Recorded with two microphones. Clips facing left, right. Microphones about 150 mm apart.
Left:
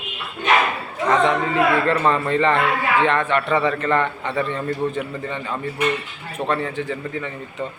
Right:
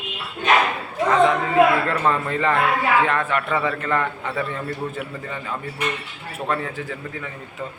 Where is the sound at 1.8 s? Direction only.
Centre (ahead or behind).